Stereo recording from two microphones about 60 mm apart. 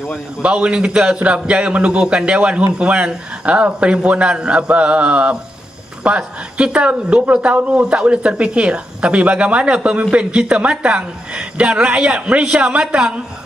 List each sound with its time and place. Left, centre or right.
0.4 s speech: centre